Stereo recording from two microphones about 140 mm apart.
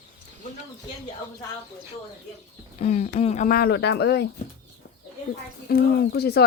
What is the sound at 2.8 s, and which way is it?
Speech, 60° left (ahead or behind).